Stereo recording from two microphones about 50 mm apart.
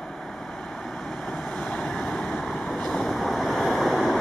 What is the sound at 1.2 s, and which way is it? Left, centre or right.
Vehicle, centre.